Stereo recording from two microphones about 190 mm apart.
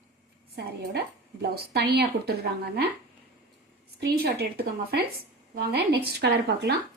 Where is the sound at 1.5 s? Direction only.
55° right (ahead or behind).